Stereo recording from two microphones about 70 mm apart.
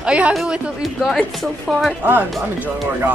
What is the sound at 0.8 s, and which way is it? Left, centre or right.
Speech, centre.